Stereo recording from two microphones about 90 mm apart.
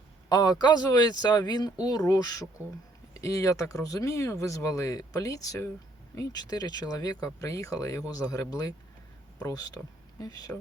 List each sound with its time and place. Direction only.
0.3 s speech: 45° left (ahead or behind)